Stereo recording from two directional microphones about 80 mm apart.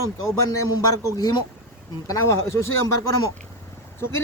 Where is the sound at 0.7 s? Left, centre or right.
Left.